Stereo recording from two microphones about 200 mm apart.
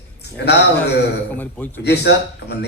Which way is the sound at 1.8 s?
55° left (ahead or behind).